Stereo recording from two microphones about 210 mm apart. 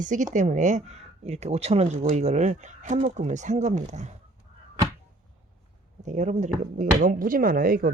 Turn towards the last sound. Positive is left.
turn(degrees=-45)  # may be behind; listen again after turning